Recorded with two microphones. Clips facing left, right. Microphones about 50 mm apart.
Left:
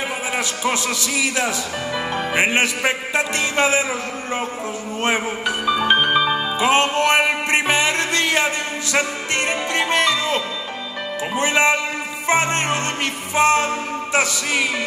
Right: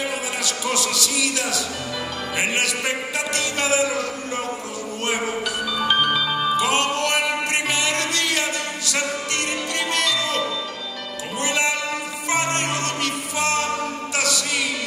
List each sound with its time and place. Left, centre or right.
0.4 s music: left
5.0 s music: left